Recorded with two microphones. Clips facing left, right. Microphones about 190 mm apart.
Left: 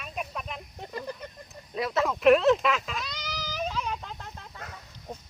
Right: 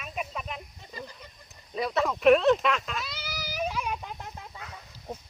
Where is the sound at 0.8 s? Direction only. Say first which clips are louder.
Left 9 dB; 60° left (ahead or behind).